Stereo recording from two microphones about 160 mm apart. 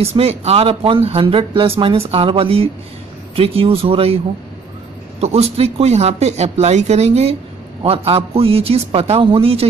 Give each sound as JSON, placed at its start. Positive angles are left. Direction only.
{"t": 0.0, "sound": "speech", "side_deg": -40}
{"t": 5.2, "sound": "speech", "side_deg": -40}